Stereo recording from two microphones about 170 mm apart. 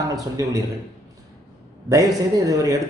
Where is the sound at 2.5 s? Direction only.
20° right (ahead or behind).